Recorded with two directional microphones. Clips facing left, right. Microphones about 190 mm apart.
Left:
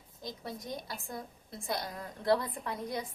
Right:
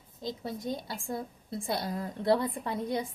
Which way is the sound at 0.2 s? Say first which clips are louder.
Right 5 dB; 25° right (ahead or behind).